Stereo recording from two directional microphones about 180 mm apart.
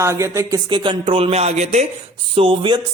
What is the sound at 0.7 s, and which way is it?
Speech, 25° right (ahead or behind).